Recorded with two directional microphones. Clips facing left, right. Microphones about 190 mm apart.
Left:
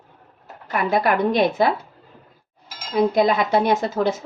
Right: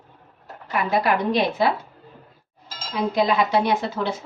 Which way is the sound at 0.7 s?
50° left (ahead or behind).